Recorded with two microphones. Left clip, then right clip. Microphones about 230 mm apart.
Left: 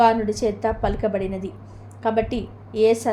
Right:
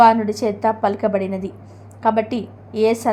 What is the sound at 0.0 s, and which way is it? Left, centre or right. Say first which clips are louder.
A woman's voice: right 5 dB; centre.